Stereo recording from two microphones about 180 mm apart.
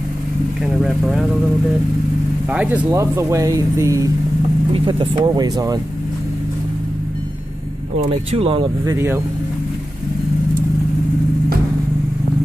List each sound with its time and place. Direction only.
0.7 s speech: centre (ahead or behind)
2.5 s speech: 5° right (ahead or behind)
2.9 s speech: 15° right (ahead or behind)
4.7 s speech: 30° right (ahead or behind)
8.3 s speech: 30° right (ahead or behind)
8.9 s speech: 15° right (ahead or behind)